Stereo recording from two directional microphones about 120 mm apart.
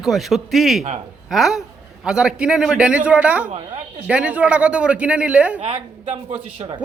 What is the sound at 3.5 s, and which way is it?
Speech, 90° right.